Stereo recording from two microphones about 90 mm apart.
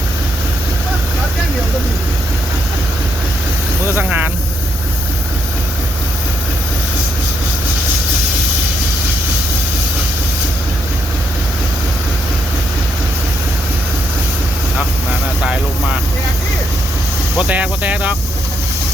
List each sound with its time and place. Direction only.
3.8 s vehicle: 25° right (ahead or behind)
17.5 s cricket: 15° right (ahead or behind)